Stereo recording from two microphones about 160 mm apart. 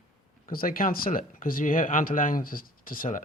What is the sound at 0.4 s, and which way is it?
Speech, 65° left (ahead or behind).